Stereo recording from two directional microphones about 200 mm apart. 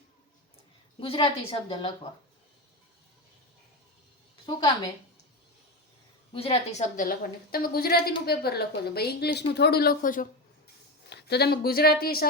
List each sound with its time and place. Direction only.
0.9 s a woman's voice: 25° left (ahead or behind)
4.4 s a woman's voice: 20° left (ahead or behind)
6.3 s a woman's voice: 30° left (ahead or behind)
11.1 s a woman's voice: 55° left (ahead or behind)